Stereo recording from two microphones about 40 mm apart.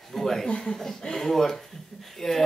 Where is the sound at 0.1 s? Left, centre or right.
Centre.